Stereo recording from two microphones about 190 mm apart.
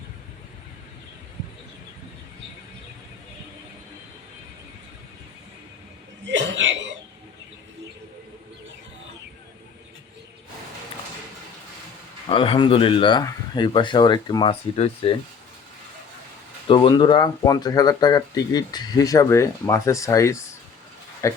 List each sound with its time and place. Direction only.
6.2 s chuckle: 75° right (ahead or behind)
12.3 s speech: 30° left (ahead or behind)
16.6 s speech: 25° left (ahead or behind)